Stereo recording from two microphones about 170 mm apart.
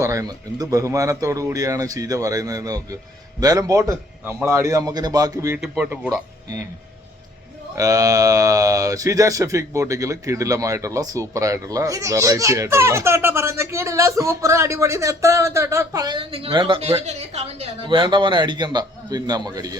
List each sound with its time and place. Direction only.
0.0 s speech: 20° right (ahead or behind)
5.5 s speech: 5° right (ahead or behind)
7.8 s speech: 20° right (ahead or behind)